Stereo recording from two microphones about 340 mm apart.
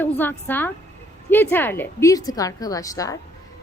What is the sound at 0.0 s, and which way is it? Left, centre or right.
A woman's voice, centre.